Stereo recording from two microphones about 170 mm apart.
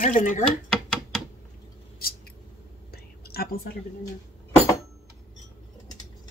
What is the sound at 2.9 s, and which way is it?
Whispering, 65° left (ahead or behind).